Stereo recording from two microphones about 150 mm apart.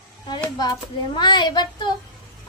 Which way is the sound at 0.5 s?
30° left (ahead or behind).